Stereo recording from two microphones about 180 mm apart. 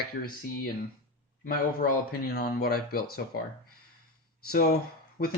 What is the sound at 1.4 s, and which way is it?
Speech, 50° left (ahead or behind).